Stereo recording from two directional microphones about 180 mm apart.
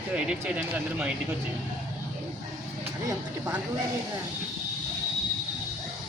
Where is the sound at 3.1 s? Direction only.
15° right (ahead or behind).